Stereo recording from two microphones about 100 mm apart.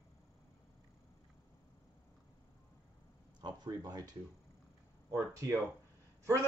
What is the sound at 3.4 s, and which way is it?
Speech, 40° right (ahead or behind).